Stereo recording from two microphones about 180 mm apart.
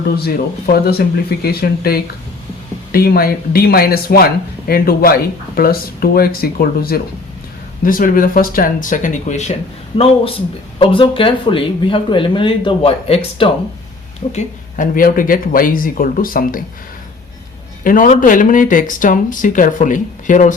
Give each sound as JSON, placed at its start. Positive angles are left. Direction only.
{"t": 0.2, "sound": "speech", "side_deg": 60}
{"t": 14.3, "sound": "speech", "side_deg": 50}
{"t": 17.8, "sound": "speech", "side_deg": 50}